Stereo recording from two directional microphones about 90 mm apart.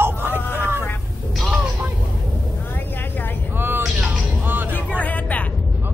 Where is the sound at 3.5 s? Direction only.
25° right (ahead or behind).